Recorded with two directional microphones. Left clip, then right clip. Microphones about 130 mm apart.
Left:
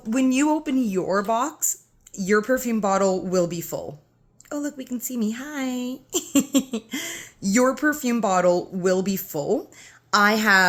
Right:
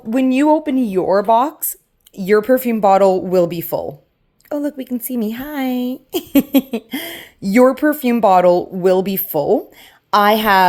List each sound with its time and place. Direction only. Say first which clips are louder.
0.1 s speech: right 7 dB; 20° right (ahead or behind); by 10.7 s 40° right (ahead or behind)